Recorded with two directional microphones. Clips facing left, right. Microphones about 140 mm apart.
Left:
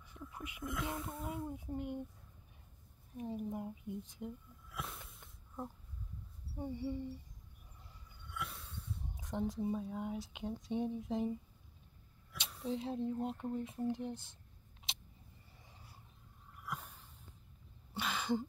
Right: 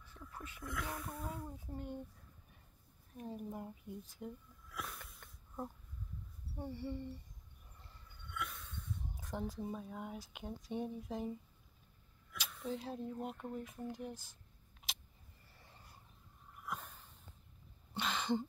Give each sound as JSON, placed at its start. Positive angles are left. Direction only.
{"t": 0.0, "sound": "speech", "side_deg": 15}
{"t": 3.2, "sound": "speech", "side_deg": 15}
{"t": 6.6, "sound": "speech", "side_deg": 10}
{"t": 8.3, "sound": "a sound", "side_deg": 30}
{"t": 9.7, "sound": "speech", "side_deg": 20}
{"t": 14.9, "sound": "vehicle", "side_deg": 25}
{"t": 15.6, "sound": "a sound", "side_deg": 10}